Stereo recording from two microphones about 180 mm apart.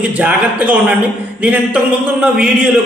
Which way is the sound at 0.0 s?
10° right (ahead or behind).